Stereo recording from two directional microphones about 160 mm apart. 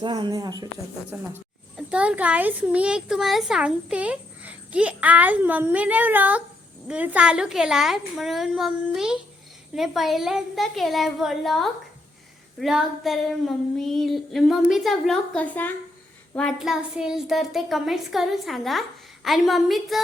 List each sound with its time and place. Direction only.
0.0 s speech: 25° right (ahead or behind)
1.1 s a woman's voice: 10° right (ahead or behind)